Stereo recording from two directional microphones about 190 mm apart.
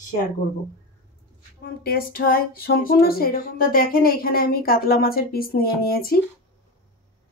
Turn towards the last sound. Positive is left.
turn(degrees=55)  # may be behind; listen again after turning